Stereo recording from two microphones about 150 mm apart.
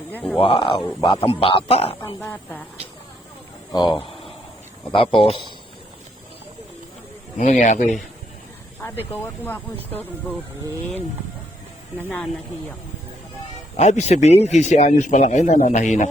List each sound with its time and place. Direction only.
0.1 s speech: 10° left (ahead or behind)
0.3 s speech: 35° left (ahead or behind)
2.2 s speech: 10° left (ahead or behind)
3.7 s speech: 30° left (ahead or behind)
7.3 s speech: 55° left (ahead or behind)
9.2 s speech: 15° left (ahead or behind)
11.9 s speech: 10° left (ahead or behind)
13.7 s speech: 50° left (ahead or behind)